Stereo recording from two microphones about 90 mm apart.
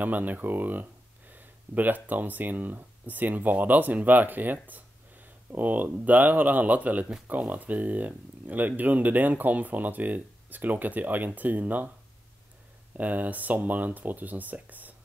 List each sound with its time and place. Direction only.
0.0 s speech: 20° right (ahead or behind)
1.3 s a sound: 20° right (ahead or behind)
2.0 s speech: 20° right (ahead or behind)
12.9 s speech: 20° right (ahead or behind)